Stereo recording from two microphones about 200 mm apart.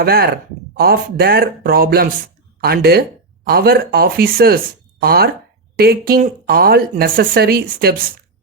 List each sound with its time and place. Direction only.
0.0 s speech: 50° right (ahead or behind)